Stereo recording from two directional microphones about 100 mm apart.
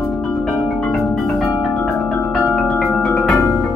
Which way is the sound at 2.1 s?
15° left (ahead or behind).